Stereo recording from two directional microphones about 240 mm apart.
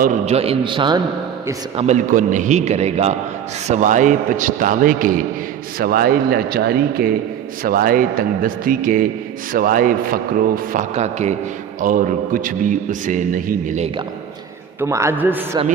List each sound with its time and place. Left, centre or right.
0.0 s a man's voice: right
14.8 s a man's voice: centre